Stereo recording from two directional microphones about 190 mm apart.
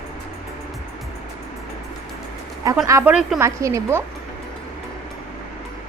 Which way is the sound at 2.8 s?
10° right (ahead or behind).